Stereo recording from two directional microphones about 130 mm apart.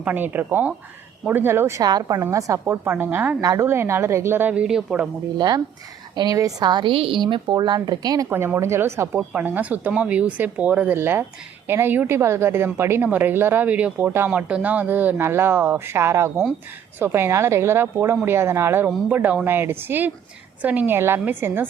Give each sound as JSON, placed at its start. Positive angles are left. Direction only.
{"t": 0.0, "sound": "a woman's voice", "side_deg": -15}
{"t": 5.4, "sound": "a woman's voice", "side_deg": -35}
{"t": 8.3, "sound": "a woman's voice", "side_deg": -20}